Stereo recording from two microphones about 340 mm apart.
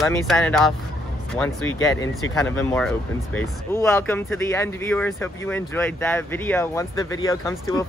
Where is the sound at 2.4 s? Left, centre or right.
Centre.